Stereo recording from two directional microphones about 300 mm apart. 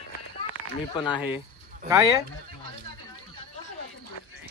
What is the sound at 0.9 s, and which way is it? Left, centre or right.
Speech, centre.